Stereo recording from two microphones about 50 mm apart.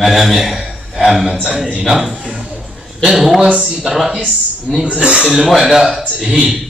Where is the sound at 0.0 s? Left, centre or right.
Centre.